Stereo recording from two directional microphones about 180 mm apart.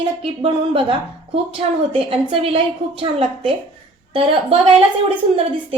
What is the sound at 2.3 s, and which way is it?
A woman's voice, 30° right (ahead or behind).